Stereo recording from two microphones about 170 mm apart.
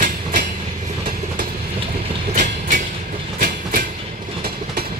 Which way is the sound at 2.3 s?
50° right (ahead or behind).